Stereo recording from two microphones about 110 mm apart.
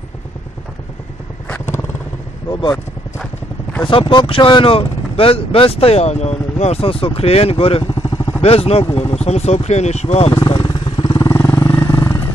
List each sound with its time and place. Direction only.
3.8 s speech: 50° left (ahead or behind)
8.4 s speech: 65° left (ahead or behind)
9.2 s speech: 80° left
10.5 s vehicle: 45° left (ahead or behind)
11.2 s vehicle: 25° left (ahead or behind)